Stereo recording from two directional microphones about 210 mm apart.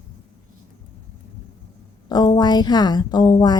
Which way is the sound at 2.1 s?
20° left (ahead or behind).